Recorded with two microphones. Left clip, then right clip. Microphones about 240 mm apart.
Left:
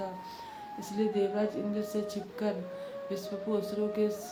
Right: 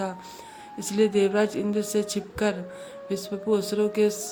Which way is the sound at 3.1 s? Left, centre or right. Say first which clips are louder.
Right 8 dB; right.